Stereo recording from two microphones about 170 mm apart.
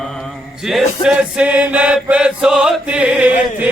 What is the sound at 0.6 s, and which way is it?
Chant, centre (ahead or behind).